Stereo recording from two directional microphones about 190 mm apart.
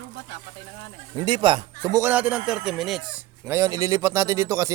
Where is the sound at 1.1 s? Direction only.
30° right (ahead or behind).